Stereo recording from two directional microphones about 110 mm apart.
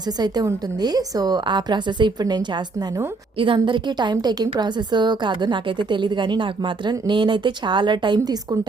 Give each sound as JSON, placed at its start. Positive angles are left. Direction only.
{"t": 0.2, "sound": "a woman's voice", "side_deg": -35}